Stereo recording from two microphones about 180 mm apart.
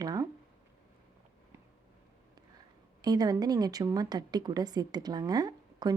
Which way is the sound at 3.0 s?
20° right (ahead or behind).